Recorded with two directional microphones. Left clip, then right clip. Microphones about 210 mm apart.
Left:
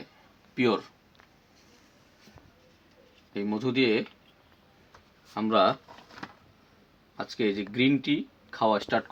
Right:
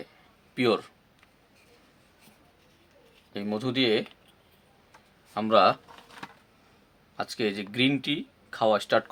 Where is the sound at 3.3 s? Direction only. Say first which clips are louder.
Left 1 dB; 35° right (ahead or behind).